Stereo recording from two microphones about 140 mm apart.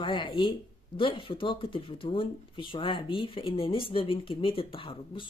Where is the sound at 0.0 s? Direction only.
35° left (ahead or behind).